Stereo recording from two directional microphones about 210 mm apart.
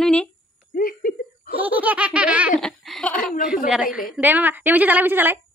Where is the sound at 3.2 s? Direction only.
40° left (ahead or behind).